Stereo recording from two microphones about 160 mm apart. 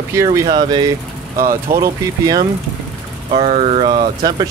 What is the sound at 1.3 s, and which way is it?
Speech, 60° right (ahead or behind).